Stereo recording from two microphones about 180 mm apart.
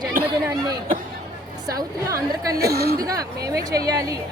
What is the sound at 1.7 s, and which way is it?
Speech, 20° right (ahead or behind).